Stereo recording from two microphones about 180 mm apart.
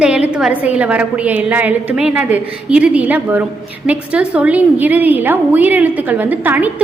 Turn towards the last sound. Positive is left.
turn(degrees=-10)  # may be behind; listen again after turning